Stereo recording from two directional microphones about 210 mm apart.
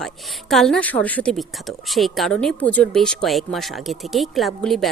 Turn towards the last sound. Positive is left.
turn(degrees=0)  # may be behind; listen again after turning